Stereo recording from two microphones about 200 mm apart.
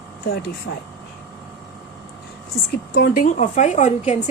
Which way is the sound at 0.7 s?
75° left (ahead or behind).